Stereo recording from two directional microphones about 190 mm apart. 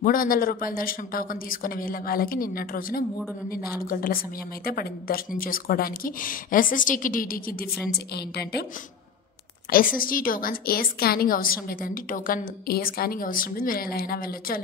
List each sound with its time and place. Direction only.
0.0 s a woman's voice: 50° left (ahead or behind)
9.9 s a woman's voice: 50° left (ahead or behind)